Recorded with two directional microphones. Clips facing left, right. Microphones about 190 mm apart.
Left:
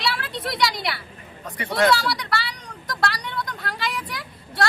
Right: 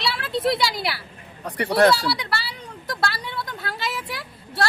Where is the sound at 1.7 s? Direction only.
30° right (ahead or behind).